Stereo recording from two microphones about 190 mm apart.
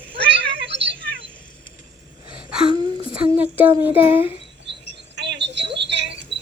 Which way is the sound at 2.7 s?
25° right (ahead or behind).